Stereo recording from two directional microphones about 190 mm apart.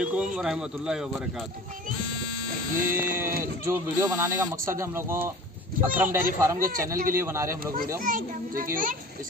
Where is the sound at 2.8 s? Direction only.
15° right (ahead or behind).